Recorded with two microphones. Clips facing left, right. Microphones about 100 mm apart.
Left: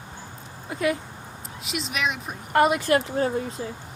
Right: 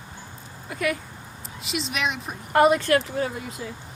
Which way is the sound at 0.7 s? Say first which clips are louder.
Left 2 dB; 25° left (ahead or behind).